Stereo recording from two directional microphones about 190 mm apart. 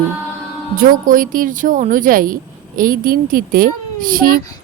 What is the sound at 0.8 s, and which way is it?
Speech, 45° right (ahead or behind).